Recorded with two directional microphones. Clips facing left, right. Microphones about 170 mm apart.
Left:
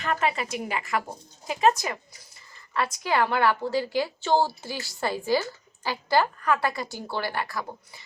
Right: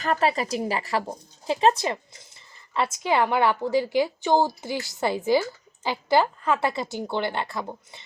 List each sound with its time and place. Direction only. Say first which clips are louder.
0.0 s a woman's voice: right 3 dB; 35° right (ahead or behind)